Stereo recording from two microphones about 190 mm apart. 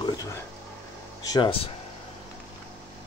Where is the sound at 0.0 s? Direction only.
20° left (ahead or behind).